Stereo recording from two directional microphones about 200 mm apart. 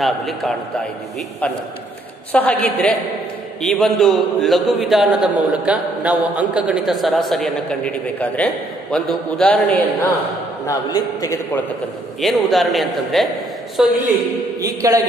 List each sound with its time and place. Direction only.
0.0 s a man's voice: centre (ahead or behind)
2.3 s a man's voice: 10° left (ahead or behind)
12.2 s a man's voice: centre (ahead or behind)
14.6 s a man's voice: 15° right (ahead or behind)